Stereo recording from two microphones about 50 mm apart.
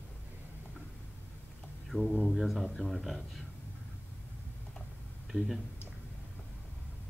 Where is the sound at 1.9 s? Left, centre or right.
Left.